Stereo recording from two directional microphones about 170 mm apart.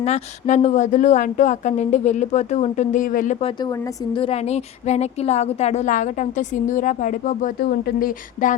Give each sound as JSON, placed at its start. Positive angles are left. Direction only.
{"t": 0.0, "sound": "speech", "side_deg": 40}
{"t": 3.4, "sound": "a woman's voice", "side_deg": 20}
{"t": 4.2, "sound": "speech", "side_deg": 35}